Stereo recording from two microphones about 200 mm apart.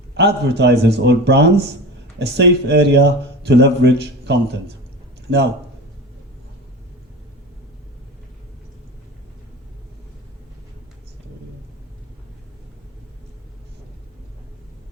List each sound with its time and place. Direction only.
0.1 s speech: 55° right (ahead or behind)